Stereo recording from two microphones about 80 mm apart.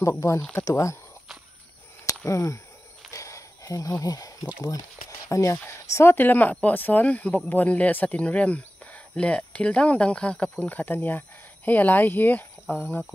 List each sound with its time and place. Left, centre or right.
0.7 s speech: left
2.2 s speech: left
3.1 s a sound: left
5.3 s speech: left; by 13.1 s centre